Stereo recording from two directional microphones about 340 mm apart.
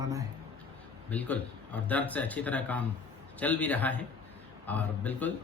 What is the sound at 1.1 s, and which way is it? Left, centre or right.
A man's voice, centre.